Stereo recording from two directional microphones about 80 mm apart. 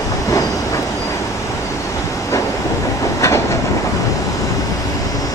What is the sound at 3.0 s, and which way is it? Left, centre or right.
Train, left.